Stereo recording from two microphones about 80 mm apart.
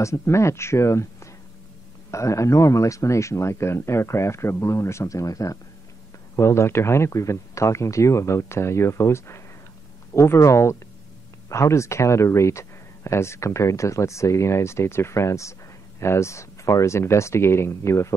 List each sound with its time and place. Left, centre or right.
0.0 s speech: left
6.3 s speech: left